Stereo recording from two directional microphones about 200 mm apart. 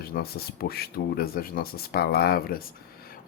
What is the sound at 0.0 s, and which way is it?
Speech, 50° left (ahead or behind).